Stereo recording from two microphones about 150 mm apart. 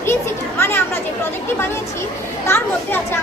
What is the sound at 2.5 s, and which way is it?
Speech, 15° left (ahead or behind).